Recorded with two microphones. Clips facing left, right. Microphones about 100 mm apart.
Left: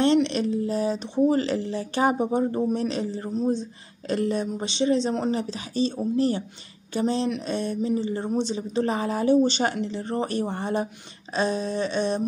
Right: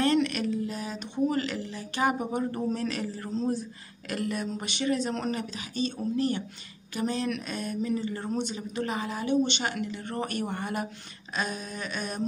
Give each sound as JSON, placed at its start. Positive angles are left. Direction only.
{"t": 0.0, "sound": "speech", "side_deg": 25}